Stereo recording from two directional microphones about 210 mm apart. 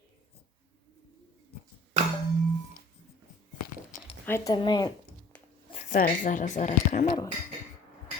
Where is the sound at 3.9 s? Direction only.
40° left (ahead or behind).